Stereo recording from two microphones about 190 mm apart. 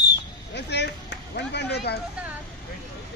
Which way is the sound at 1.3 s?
60° left (ahead or behind).